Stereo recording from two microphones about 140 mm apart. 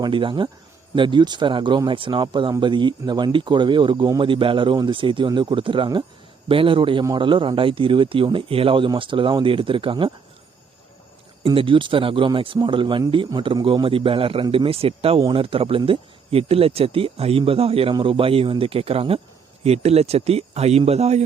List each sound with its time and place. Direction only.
0.0 s speech: 35° right (ahead or behind)
11.4 s speech: 35° right (ahead or behind)